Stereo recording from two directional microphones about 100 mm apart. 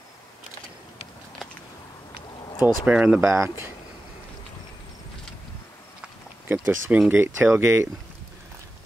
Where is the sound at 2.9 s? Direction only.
10° right (ahead or behind).